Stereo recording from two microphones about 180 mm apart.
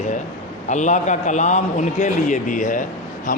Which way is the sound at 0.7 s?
40° left (ahead or behind).